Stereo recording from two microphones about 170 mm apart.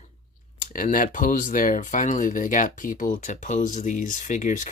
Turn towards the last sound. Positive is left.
turn(degrees=45)  # may be behind; listen again after turning